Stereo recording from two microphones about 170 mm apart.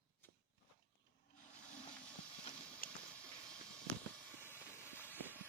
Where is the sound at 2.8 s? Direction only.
60° left (ahead or behind).